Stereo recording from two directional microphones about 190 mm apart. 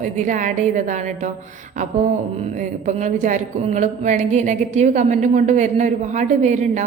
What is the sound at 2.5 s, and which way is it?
A woman's voice, 40° right (ahead or behind).